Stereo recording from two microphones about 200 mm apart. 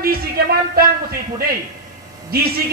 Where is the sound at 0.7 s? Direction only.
50° right (ahead or behind).